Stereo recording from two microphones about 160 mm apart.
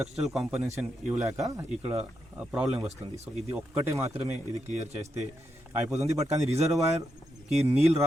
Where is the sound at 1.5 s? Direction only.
15° right (ahead or behind).